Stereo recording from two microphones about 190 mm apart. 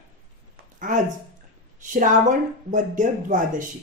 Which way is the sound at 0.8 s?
40° right (ahead or behind).